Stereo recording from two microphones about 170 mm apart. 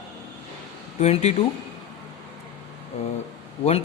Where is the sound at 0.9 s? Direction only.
40° left (ahead or behind).